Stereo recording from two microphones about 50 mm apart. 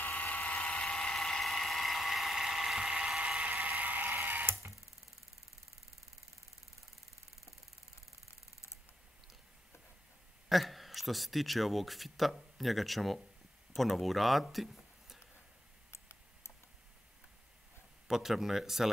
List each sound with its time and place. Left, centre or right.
0.0 s vehicle: left; by 4.2 s right
4.2 s a sound: right
10.5 s a man's voice: centre
15.9 s computer keyboard: left
18.0 s speech: centre